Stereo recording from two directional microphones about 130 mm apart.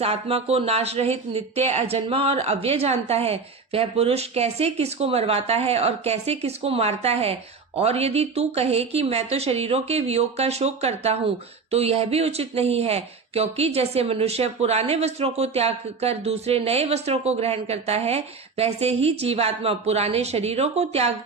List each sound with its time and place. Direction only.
0.0 s speech: 50° right (ahead or behind)